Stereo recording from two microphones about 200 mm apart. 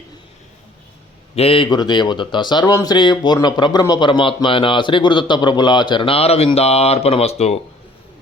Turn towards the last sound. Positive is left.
turn(degrees=30)  # may be behind; listen again after turning